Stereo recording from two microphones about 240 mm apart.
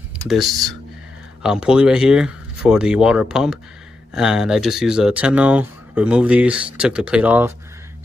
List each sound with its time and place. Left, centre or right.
0.3 s speech: centre